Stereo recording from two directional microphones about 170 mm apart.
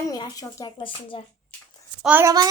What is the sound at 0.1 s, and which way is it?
Speech, 20° left (ahead or behind).